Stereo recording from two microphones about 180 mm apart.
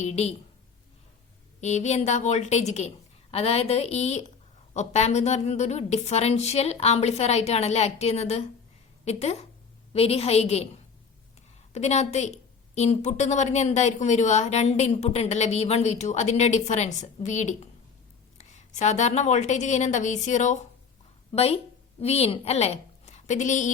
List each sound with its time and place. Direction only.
0.0 s a woman's voice: 35° left (ahead or behind)
1.6 s a woman's voice: 40° left (ahead or behind)
11.7 s a woman's voice: 40° left (ahead or behind)